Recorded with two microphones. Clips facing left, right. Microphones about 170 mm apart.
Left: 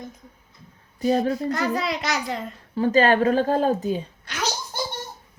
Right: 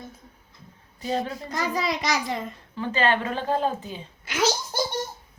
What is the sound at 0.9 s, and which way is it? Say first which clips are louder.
Speech: left 7 dB; 45° left (ahead or behind).